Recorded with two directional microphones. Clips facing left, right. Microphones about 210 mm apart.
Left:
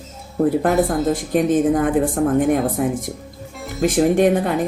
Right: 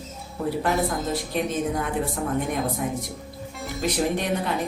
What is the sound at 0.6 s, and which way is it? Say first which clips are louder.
Speech: left 7 dB; 50° left (ahead or behind).